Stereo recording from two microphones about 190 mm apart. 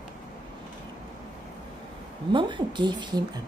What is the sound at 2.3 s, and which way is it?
Speech, 25° right (ahead or behind).